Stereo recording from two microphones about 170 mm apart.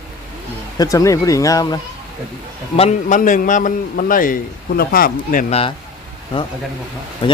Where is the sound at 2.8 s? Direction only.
45° left (ahead or behind).